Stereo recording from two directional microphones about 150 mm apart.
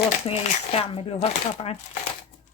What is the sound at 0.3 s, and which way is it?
Speech, 40° left (ahead or behind).